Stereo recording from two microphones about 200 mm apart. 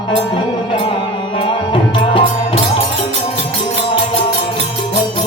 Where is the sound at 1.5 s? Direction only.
25° left (ahead or behind).